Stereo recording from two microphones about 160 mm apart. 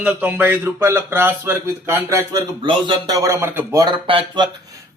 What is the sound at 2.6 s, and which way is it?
Speech, 30° right (ahead or behind).